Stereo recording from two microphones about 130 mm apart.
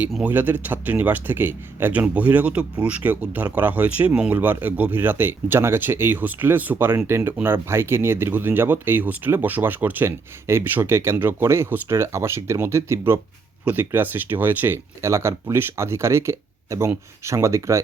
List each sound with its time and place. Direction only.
0.3 s speech: 15° right (ahead or behind)